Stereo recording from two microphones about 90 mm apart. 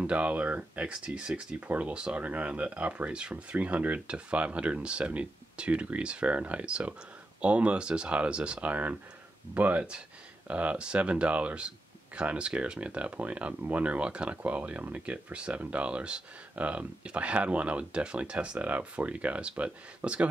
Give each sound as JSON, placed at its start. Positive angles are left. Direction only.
{"t": 0.0, "sound": "speech", "side_deg": -15}